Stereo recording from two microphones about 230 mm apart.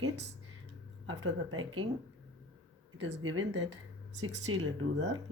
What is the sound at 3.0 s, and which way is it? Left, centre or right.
Speech, right.